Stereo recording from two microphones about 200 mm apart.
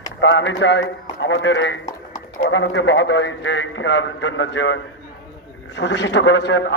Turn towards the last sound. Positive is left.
turn(degrees=60)  # may be behind; listen again after turning